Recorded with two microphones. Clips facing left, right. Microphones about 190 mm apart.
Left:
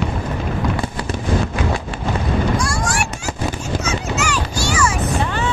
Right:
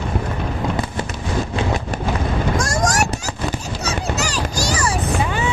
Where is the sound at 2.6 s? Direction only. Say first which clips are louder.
Right 2 dB; 45° right (ahead or behind).